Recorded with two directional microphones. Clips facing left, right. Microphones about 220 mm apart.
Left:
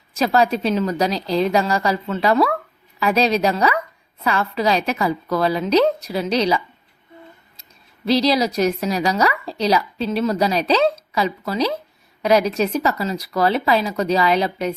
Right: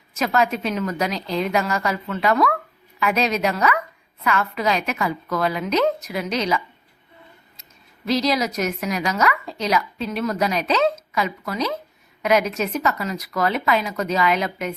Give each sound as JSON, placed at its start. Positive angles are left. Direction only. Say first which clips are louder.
{"t": 0.2, "sound": "a woman's voice", "louder": "left 3 dB", "side_deg": 30}
{"t": 8.0, "sound": "a woman's voice", "louder": "left 4 dB", "side_deg": 30}